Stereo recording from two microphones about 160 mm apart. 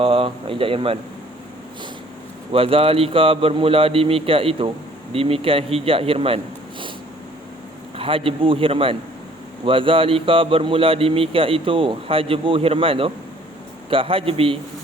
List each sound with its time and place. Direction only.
0.0 s speech: 35° right (ahead or behind)
2.5 s speech: 35° right (ahead or behind)
7.9 s speech: 35° right (ahead or behind)